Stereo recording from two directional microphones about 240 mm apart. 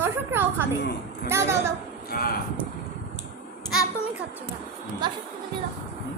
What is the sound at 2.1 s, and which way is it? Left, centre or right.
Speech, left.